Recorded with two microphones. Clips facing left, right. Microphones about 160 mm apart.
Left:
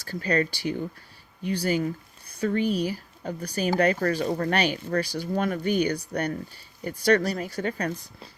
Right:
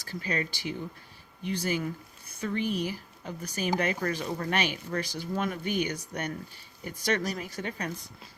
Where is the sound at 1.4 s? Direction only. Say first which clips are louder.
Left 4 dB; 60° left (ahead or behind).